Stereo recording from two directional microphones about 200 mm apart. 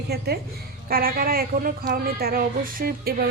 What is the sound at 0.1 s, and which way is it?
Speech, 55° right (ahead or behind).